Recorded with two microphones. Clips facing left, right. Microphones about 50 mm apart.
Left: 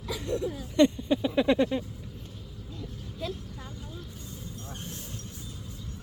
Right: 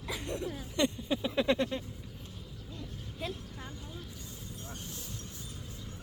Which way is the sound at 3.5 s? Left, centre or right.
Centre.